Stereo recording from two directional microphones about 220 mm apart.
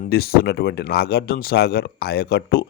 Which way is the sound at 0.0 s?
45° left (ahead or behind).